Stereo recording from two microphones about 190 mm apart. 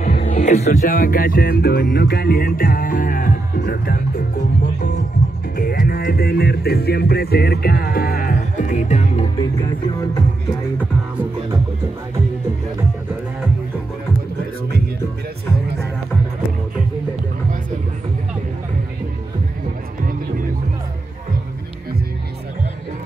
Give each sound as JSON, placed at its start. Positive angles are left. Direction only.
{"t": 0.0, "sound": "music", "side_deg": 45}
{"t": 5.6, "sound": "music", "side_deg": 50}